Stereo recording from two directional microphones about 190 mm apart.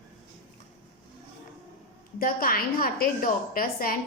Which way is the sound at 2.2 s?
50° left (ahead or behind).